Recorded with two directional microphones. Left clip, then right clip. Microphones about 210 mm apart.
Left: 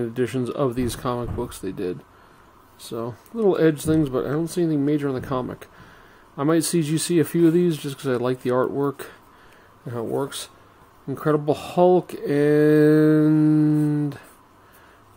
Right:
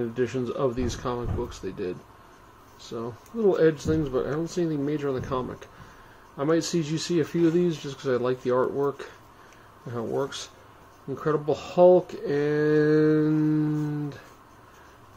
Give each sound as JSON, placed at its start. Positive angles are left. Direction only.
{"t": 0.0, "sound": "speech", "side_deg": 50}